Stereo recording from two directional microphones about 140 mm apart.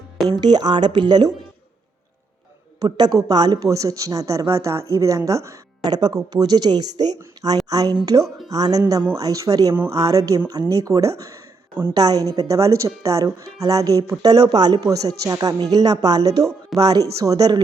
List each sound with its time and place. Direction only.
0.3 s speech: 30° right (ahead or behind)
2.8 s speech: 30° right (ahead or behind)